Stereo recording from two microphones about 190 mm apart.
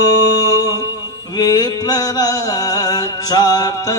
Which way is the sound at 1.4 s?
20° left (ahead or behind).